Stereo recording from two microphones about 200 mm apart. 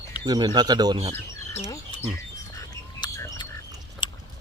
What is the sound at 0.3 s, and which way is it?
Speech, 20° right (ahead or behind).